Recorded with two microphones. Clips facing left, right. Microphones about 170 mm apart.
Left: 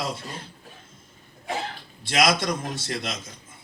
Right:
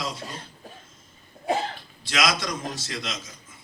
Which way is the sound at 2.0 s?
55° left (ahead or behind).